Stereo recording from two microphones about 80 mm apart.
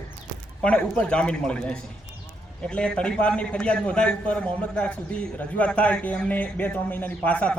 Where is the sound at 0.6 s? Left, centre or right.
Centre.